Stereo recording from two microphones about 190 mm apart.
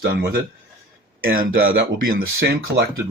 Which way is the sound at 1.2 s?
50° right (ahead or behind).